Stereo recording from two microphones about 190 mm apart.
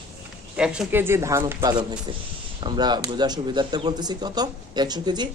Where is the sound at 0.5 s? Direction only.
5° right (ahead or behind).